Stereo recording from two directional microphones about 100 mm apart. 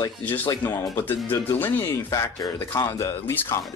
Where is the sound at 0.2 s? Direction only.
20° left (ahead or behind).